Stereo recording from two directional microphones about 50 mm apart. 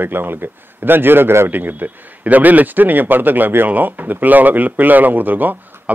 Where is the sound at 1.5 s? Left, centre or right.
Right.